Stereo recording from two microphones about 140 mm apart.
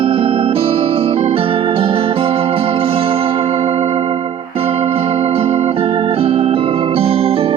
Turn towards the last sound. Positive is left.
turn(degrees=-40)  # may be behind; listen again after turning